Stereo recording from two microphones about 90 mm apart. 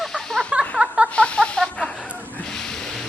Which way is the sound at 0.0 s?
5° left (ahead or behind).